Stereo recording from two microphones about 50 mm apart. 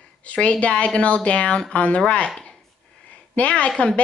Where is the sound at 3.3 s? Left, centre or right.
Left.